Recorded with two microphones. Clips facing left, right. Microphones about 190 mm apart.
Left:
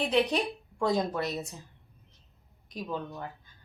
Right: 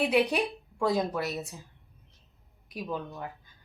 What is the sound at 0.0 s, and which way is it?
A woman's voice, 10° right (ahead or behind).